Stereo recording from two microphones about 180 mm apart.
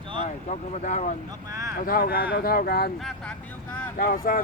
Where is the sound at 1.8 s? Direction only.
55° left (ahead or behind).